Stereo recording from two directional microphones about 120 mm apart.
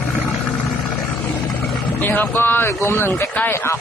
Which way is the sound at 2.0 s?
15° left (ahead or behind).